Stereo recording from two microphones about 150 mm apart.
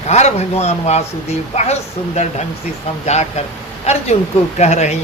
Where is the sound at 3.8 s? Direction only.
45° left (ahead or behind).